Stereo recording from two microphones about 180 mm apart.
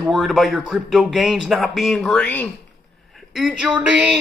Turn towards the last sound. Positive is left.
turn(degrees=-5)  # may be behind; listen again after turning